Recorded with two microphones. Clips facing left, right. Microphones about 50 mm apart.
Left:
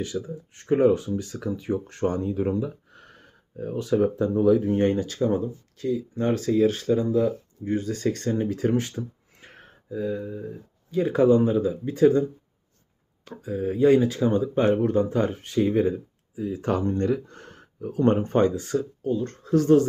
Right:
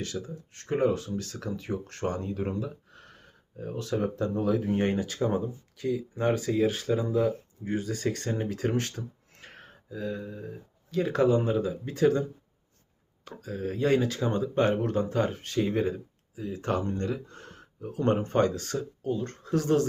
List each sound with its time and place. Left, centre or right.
0.0 s speech: centre
13.3 s speech: centre
16.3 s speech: left
17.0 s speech: left
18.0 s speech: left; by 18.9 s centre
19.0 s speech: centre